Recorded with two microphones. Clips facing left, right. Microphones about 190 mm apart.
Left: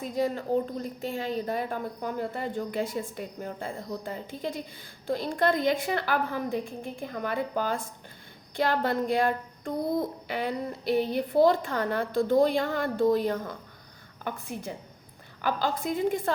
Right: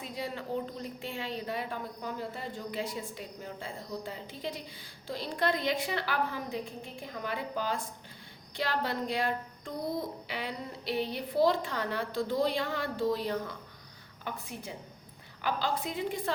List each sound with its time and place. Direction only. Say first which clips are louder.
0.0 s a woman's voice: left 9 dB; 45° left (ahead or behind)